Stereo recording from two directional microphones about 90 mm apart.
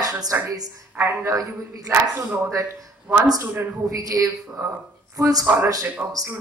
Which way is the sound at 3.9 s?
40° right (ahead or behind).